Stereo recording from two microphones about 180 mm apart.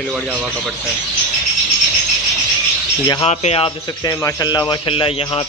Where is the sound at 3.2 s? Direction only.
35° left (ahead or behind).